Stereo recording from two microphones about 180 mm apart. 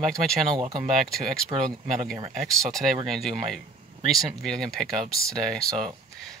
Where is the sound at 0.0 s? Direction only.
Centre (ahead or behind).